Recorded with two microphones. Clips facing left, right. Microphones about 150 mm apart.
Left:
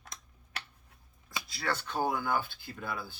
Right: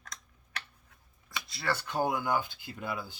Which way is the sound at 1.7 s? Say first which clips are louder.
Right 1 dB; 10° right (ahead or behind).